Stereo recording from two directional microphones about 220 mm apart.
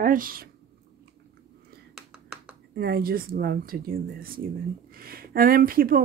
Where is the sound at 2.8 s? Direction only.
45° right (ahead or behind).